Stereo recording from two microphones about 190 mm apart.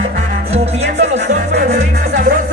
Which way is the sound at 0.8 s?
35° right (ahead or behind).